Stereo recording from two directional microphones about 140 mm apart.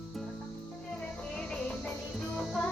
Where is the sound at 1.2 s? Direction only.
5° left (ahead or behind).